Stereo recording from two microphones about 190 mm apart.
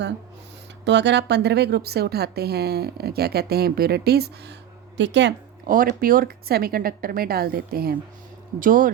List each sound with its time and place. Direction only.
0.9 s a woman's voice: 65° right (ahead or behind)
5.6 s a woman's voice: 45° right (ahead or behind)